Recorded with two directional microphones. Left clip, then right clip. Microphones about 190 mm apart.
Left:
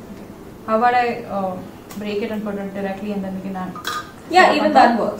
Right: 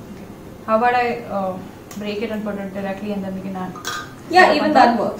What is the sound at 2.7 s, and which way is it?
Speech, centre (ahead or behind).